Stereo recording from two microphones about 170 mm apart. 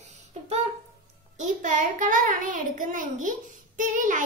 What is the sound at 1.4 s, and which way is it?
A child's voice, 50° right (ahead or behind).